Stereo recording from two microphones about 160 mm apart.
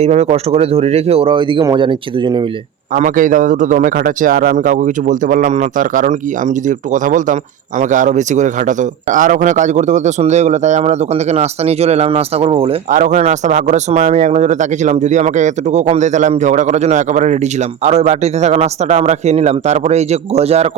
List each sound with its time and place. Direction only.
0.0 s speech: 45° right (ahead or behind)
2.9 s a man's voice: 55° right (ahead or behind); by 12.7 s 40° right (ahead or behind)
12.9 s speech: 50° right (ahead or behind)